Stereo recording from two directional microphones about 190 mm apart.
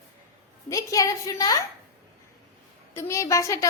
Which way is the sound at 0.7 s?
15° left (ahead or behind).